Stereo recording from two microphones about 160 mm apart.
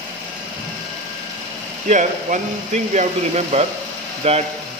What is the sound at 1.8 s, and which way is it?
A man's voice, 50° right (ahead or behind).